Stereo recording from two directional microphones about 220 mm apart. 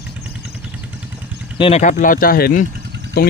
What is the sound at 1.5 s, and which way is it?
Speech, 25° left (ahead or behind).